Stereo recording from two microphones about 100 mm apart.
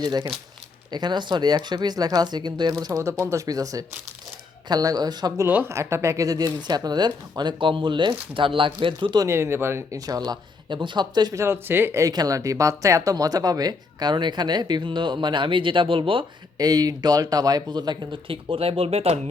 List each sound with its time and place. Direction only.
0.0 s speech: 45° right (ahead or behind)
5.5 s speech: 20° right (ahead or behind); by 9.2 s 50° right (ahead or behind)
9.2 s speech: 25° right (ahead or behind); by 11.3 s 45° right (ahead or behind)
11.3 s speech: 25° right (ahead or behind); by 16.2 s 60° right (ahead or behind)
16.6 s speech: 40° right (ahead or behind)
18.3 s speech: 70° right (ahead or behind); by 19.1 s 90° right